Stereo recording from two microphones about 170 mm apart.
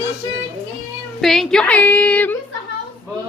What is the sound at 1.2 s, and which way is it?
A woman's voice, centre (ahead or behind).